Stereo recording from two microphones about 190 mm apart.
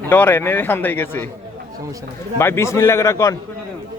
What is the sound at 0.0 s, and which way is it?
A man's voice, 10° left (ahead or behind).